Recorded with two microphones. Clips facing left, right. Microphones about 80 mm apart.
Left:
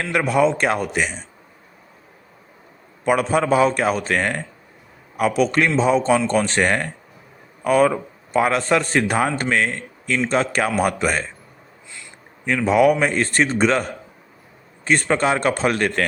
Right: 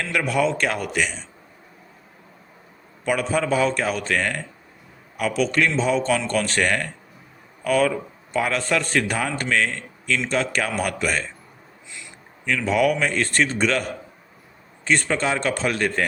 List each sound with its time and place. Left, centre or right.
0.0 s speech: left
3.0 s speech: left
5.4 s speech: left
6.1 s speech: left
12.5 s speech: left
14.8 s speech: left